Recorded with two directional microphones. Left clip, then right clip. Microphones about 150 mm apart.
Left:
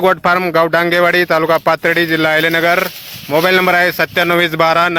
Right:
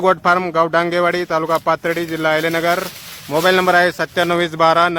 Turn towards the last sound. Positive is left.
turn(degrees=25)  # may be behind; listen again after turning